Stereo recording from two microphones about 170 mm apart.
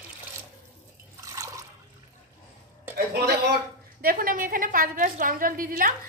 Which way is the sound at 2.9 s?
65° right (ahead or behind).